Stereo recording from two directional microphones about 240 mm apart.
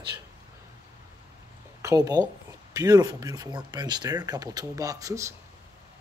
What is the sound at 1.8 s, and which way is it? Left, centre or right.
Speech, centre.